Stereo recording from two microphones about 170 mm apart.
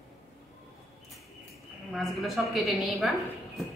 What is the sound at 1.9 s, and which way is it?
A woman's voice, centre (ahead or behind).